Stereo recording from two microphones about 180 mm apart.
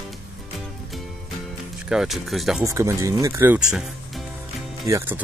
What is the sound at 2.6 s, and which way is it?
Speech, 15° right (ahead or behind).